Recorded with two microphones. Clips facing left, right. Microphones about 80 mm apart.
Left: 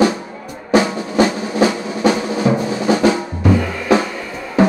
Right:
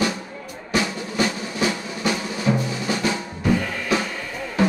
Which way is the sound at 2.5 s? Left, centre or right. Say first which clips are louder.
Left 6 dB; left.